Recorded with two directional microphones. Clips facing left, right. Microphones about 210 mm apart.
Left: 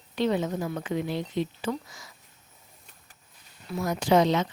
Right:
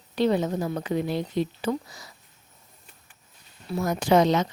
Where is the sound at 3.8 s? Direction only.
50° right (ahead or behind).